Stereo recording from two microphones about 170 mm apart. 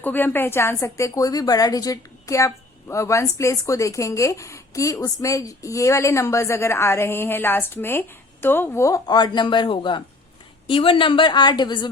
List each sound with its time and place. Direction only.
0.0 s a woman's voice: 10° left (ahead or behind); by 11.9 s 25° left (ahead or behind)